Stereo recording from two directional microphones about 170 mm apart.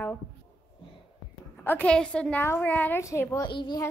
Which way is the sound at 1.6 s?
5° left (ahead or behind).